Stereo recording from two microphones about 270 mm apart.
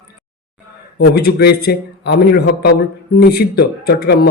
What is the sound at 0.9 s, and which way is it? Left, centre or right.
Speech, left.